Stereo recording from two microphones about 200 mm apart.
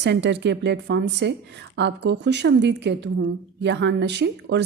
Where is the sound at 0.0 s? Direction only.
60° right (ahead or behind).